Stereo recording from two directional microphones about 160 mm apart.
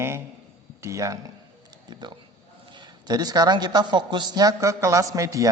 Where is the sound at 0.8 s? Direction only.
20° right (ahead or behind).